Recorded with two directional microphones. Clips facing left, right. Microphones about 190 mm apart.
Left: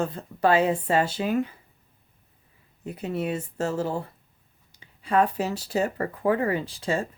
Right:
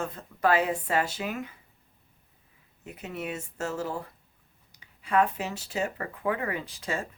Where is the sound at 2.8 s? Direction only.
35° left (ahead or behind).